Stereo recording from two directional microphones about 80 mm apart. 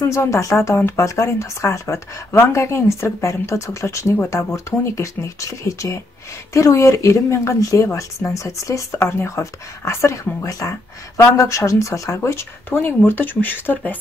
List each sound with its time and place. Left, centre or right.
0.1 s speech: left
12.3 s speech: left